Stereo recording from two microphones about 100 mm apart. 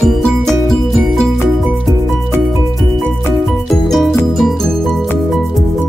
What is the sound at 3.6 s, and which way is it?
Music, centre (ahead or behind).